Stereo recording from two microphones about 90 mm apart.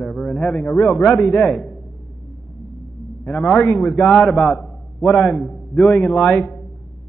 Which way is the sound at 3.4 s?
Centre (ahead or behind).